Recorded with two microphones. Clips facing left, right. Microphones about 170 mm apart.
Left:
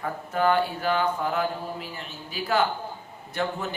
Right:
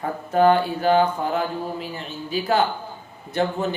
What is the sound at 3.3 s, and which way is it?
Speech, 25° right (ahead or behind).